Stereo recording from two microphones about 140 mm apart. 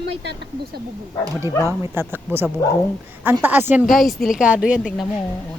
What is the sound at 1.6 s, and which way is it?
Speech, 15° right (ahead or behind).